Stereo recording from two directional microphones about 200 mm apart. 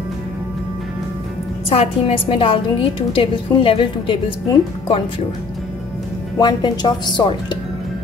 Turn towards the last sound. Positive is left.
turn(degrees=20)  # may be behind; listen again after turning